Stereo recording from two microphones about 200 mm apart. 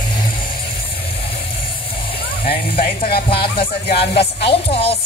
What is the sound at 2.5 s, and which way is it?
Speech, 50° left (ahead or behind).